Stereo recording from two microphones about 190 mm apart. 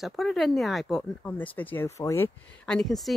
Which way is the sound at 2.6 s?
5° left (ahead or behind).